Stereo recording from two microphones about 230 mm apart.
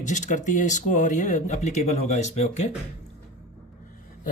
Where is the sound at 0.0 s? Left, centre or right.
Left.